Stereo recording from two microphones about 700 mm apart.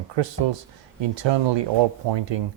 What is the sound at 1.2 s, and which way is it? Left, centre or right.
Speech, right.